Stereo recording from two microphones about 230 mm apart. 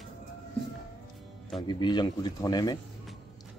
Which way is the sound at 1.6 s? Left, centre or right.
Centre.